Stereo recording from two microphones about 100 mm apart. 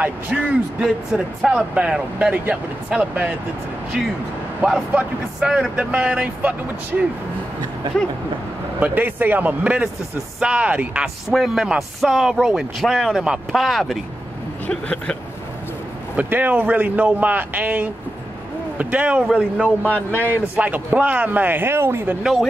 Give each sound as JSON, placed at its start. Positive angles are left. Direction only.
{"t": 0.0, "sound": "speech", "side_deg": -10}
{"t": 4.6, "sound": "speech", "side_deg": -10}
{"t": 8.7, "sound": "speech", "side_deg": -15}
{"t": 14.7, "sound": "speech", "side_deg": 10}
{"t": 16.2, "sound": "speech", "side_deg": -15}
{"t": 19.8, "sound": "speech", "side_deg": 15}
{"t": 20.5, "sound": "speech", "side_deg": -15}
{"t": 22.2, "sound": "speech", "side_deg": 0}